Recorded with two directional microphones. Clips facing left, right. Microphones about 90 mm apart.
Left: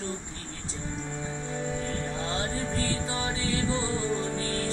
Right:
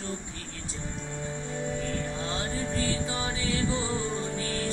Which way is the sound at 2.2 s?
35° left (ahead or behind).